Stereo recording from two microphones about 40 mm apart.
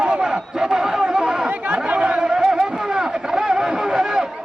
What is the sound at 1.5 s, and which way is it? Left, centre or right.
Speech, right.